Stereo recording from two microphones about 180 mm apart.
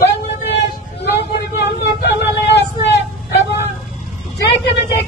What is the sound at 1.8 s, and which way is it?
Vehicle, 70° left (ahead or behind).